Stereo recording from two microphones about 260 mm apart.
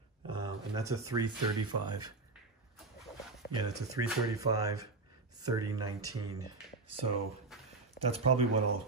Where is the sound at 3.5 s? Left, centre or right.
Centre.